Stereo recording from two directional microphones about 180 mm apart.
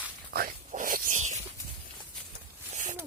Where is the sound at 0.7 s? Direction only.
45° right (ahead or behind).